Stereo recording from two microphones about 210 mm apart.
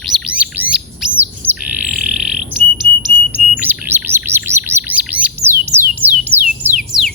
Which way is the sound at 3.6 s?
10° right (ahead or behind).